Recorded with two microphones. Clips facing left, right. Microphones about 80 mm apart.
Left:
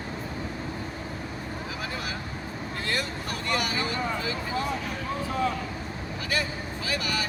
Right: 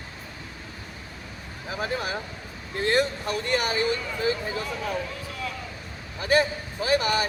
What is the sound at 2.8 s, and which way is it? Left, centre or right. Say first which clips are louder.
Speech: right 9 dB; right.